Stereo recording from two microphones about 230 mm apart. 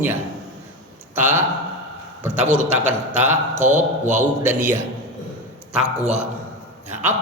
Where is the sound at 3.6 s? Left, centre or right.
Right.